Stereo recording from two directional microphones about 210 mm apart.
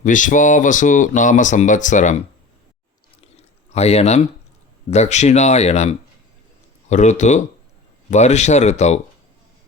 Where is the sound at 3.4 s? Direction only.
30° left (ahead or behind).